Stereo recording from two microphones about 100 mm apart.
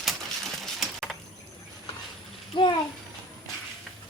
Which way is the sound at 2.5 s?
50° left (ahead or behind).